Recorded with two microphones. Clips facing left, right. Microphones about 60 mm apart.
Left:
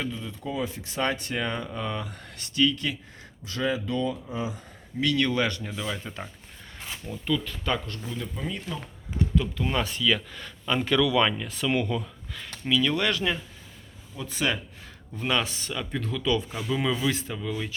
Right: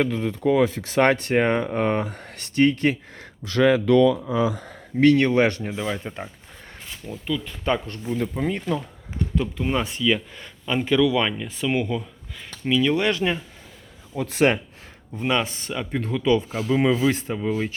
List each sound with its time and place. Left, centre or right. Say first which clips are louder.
0.0 s speech: right 11 dB; right
3.2 s speech: right 10 dB; right
4.9 s speech: right 8 dB; right
7.0 s speech: even; centre
7.6 s speech: right 5 dB; right
8.1 s speech: right 10 dB; right
9.4 s speech: right 4 dB; centre
14.2 s speech: right 8 dB; right
15.2 s speech: right 4 dB; right
15.4 s speech: right 4 dB; right